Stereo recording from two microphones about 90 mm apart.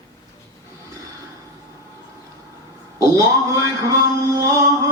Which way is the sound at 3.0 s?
40° right (ahead or behind).